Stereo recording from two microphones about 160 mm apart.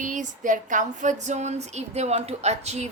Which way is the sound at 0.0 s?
50° right (ahead or behind).